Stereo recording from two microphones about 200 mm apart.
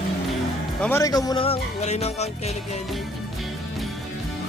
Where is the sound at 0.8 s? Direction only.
15° left (ahead or behind); by 2.2 s 35° left (ahead or behind).